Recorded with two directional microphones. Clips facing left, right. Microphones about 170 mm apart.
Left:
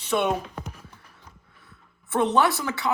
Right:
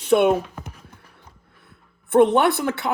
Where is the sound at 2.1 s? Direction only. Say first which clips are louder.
Right 6 dB; 55° right (ahead or behind).